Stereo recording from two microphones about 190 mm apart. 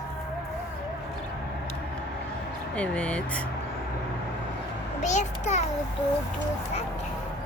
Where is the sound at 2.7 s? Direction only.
5° left (ahead or behind).